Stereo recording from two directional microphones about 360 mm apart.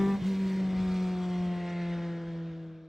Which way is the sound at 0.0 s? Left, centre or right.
Centre.